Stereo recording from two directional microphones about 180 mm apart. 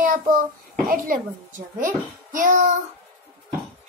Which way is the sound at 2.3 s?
45° right (ahead or behind).